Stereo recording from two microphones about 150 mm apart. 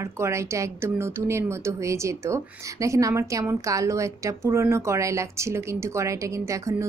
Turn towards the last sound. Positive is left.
turn(degrees=-20)  # may be behind; listen again after turning